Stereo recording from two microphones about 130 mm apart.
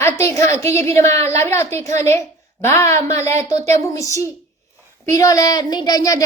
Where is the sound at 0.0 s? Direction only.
20° left (ahead or behind).